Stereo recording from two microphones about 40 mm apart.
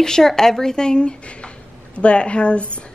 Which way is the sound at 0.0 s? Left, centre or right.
Centre.